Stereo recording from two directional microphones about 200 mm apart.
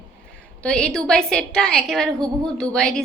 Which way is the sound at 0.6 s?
5° left (ahead or behind).